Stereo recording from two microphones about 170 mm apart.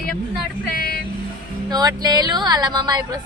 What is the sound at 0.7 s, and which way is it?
Speech, 60° left (ahead or behind).